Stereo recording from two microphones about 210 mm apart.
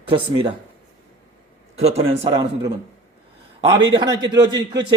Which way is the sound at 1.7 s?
30° right (ahead or behind).